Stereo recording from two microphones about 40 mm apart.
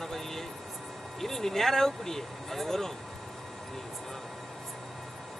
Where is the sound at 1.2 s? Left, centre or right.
Centre.